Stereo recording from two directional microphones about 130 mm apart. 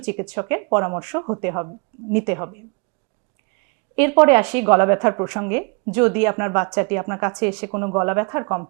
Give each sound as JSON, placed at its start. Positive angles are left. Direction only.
{"t": 0.0, "sound": "a woman's voice", "side_deg": -20}
{"t": 3.9, "sound": "a woman's voice", "side_deg": -20}